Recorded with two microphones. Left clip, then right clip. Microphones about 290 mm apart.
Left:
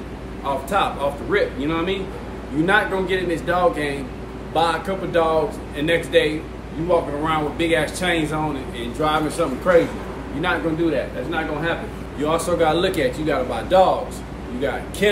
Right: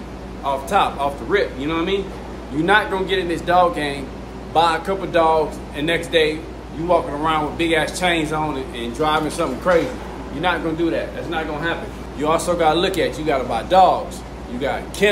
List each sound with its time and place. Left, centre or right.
0.4 s a man's voice: centre
12.2 s a man's voice: centre